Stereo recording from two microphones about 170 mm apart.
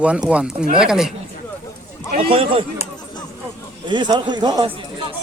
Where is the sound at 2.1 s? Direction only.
30° right (ahead or behind).